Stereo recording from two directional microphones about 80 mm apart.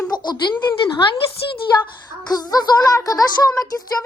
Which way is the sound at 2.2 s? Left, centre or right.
Left.